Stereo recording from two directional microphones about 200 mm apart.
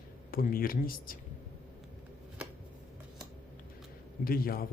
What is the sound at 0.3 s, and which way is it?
Speech, 45° left (ahead or behind).